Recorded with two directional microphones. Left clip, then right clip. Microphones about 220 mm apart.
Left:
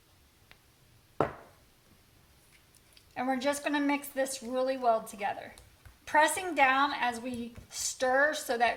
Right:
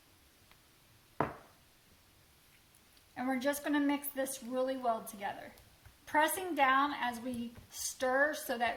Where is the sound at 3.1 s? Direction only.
30° left (ahead or behind).